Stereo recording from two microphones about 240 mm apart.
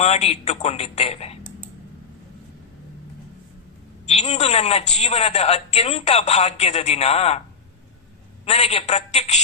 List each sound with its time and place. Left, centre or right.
0.0 s a woman's voice: left
4.1 s a woman's voice: left
8.4 s a woman's voice: left